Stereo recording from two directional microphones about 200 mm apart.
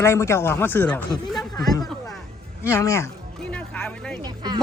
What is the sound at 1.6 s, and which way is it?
Speech, 20° left (ahead or behind).